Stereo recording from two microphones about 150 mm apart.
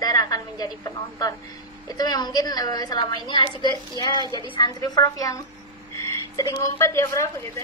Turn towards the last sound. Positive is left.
turn(degrees=15)  # may be behind; listen again after turning